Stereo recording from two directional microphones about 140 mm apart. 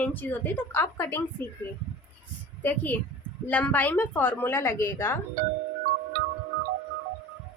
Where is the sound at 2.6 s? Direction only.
10° left (ahead or behind).